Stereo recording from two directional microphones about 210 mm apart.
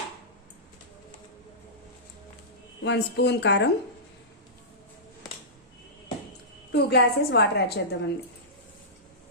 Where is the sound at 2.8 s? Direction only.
55° left (ahead or behind).